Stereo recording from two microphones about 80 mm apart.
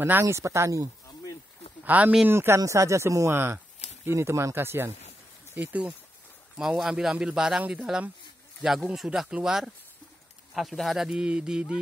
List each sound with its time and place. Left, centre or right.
0.0 s speech: right
1.9 s speech: right
2.2 s speech: right
3.3 s speech: right
5.5 s speech: centre
6.5 s speech: centre